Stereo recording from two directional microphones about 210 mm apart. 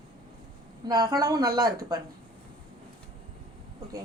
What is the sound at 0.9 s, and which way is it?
Speech, 15° right (ahead or behind).